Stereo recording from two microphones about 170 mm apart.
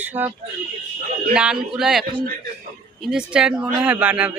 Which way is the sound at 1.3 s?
5° right (ahead or behind).